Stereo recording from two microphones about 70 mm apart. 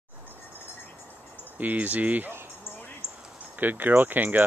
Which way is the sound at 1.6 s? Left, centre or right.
Right.